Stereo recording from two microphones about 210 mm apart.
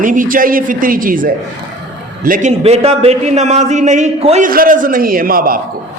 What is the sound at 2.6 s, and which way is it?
A man's voice, 30° right (ahead or behind).